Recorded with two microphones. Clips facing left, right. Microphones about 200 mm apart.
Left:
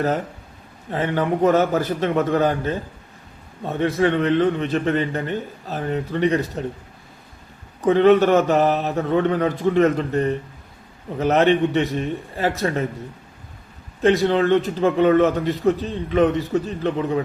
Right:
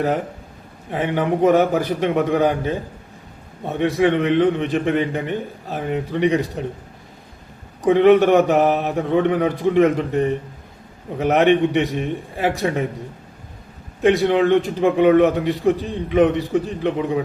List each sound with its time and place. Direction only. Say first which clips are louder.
0.9 s a man's voice: right 1 dB; 15° right (ahead or behind)
7.9 s a man's voice: right 2 dB; 15° right (ahead or behind)
14.0 s a man's voice: right 1 dB; 15° right (ahead or behind)